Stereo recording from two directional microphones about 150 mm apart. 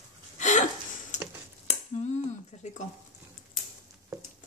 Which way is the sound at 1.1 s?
55° left (ahead or behind).